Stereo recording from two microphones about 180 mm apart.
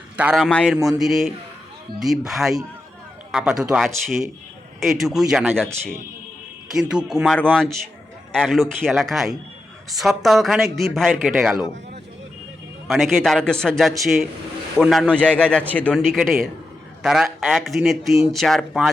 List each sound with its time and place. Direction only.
0.2 s speech: 5° right (ahead or behind)
6.7 s speech: 5° right (ahead or behind)
12.9 s speech: centre (ahead or behind)